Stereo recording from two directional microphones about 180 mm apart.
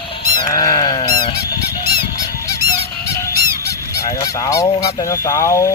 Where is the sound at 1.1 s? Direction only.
20° left (ahead or behind).